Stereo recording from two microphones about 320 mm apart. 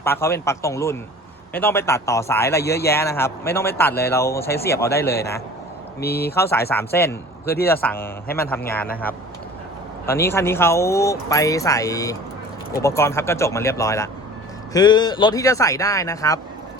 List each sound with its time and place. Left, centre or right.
0.0 s speech: centre
4.4 s a man's voice: left
6.3 s speech: centre
10.1 s speech: centre